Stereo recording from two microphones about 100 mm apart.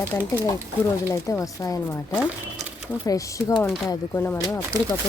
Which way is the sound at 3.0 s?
35° left (ahead or behind).